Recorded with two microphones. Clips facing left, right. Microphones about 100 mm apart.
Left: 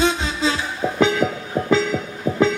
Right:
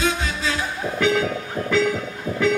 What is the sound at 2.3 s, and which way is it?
Music, 25° left (ahead or behind).